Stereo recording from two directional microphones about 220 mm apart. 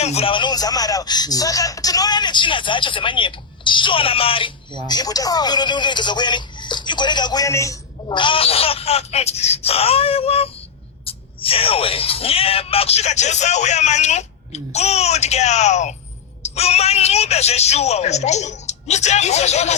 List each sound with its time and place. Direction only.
0.0 s speech: 30° left (ahead or behind)